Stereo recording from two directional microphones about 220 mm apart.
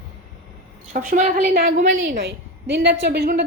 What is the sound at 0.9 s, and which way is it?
A woman's voice, 35° right (ahead or behind).